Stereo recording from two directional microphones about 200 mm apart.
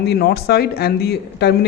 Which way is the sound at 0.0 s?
55° left (ahead or behind).